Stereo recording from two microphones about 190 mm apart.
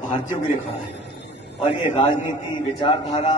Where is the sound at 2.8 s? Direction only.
25° left (ahead or behind).